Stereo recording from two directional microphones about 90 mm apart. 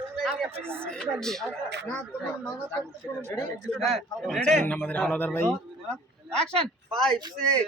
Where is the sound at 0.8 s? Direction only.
10° left (ahead or behind).